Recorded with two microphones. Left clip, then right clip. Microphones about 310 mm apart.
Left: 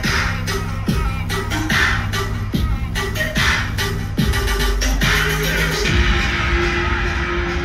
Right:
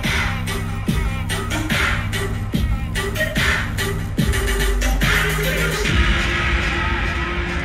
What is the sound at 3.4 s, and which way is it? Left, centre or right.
Music, centre.